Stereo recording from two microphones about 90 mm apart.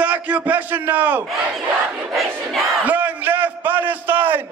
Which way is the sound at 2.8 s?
20° right (ahead or behind).